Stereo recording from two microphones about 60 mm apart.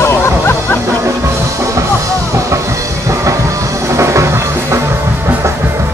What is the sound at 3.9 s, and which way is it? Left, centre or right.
Music, right.